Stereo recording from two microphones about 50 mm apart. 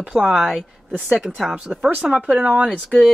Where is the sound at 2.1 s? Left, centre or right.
Right.